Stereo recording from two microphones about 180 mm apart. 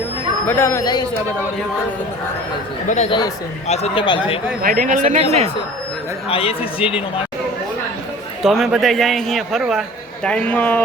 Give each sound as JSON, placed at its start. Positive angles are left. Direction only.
{"t": 0.4, "sound": "speech", "side_deg": 15}
{"t": 2.8, "sound": "speech", "side_deg": 40}
{"t": 3.1, "sound": "speech", "side_deg": 25}
{"t": 3.7, "sound": "speech", "side_deg": 35}
{"t": 4.6, "sound": "speech", "side_deg": -50}
{"t": 6.2, "sound": "speech", "side_deg": 30}
{"t": 8.4, "sound": "a man's voice", "side_deg": 0}